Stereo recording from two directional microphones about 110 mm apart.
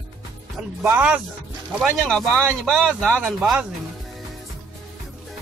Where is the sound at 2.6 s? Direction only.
5° left (ahead or behind).